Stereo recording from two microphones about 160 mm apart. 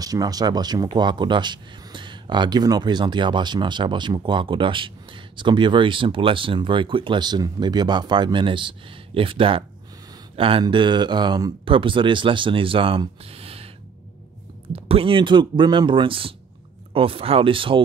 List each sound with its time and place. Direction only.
0.0 s speech: 25° right (ahead or behind)
14.9 s speech: 35° right (ahead or behind)